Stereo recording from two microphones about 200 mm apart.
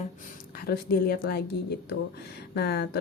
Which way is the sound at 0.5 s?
50° left (ahead or behind).